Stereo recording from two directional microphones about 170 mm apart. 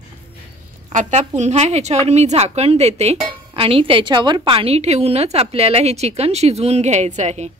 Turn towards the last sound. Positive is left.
turn(degrees=-40)  # may be behind; listen again after turning